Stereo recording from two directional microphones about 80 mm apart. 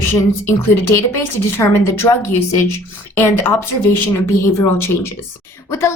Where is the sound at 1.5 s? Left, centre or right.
Left.